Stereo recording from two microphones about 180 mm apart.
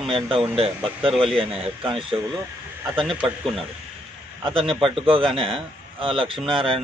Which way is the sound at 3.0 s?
Centre (ahead or behind).